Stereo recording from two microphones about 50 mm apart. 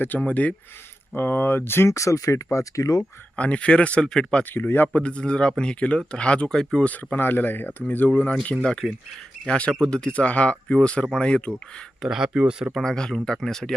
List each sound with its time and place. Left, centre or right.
0.2 s speech: left
1.1 s speech: left
1.9 s speech: left
3.3 s speech: left
4.5 s speech: left
4.9 s speech: left
8.6 s speech: centre
12.0 s speech: centre
12.8 s speech: centre